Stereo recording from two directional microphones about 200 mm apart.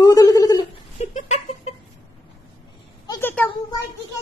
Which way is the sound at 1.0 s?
35° left (ahead or behind).